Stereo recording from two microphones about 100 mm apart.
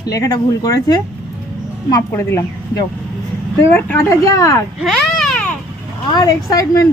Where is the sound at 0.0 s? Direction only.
40° left (ahead or behind).